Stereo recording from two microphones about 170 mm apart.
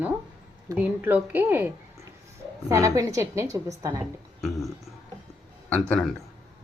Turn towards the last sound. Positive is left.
turn(degrees=10)  # may be behind; listen again after turning